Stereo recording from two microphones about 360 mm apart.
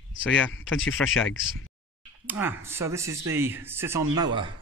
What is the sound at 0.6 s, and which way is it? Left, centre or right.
Speech, left.